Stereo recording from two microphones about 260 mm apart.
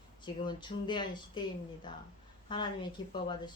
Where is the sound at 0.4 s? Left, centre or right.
Centre.